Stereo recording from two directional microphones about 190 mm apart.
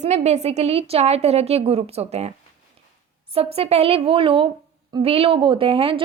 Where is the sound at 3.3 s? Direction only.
30° right (ahead or behind).